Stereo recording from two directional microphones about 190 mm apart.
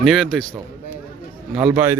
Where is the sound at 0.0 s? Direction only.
Centre (ahead or behind).